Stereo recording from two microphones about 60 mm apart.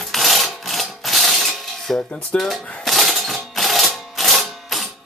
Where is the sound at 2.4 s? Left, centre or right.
Centre.